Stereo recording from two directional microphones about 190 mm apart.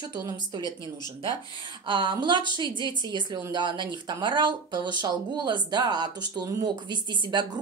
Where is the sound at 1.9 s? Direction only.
25° right (ahead or behind).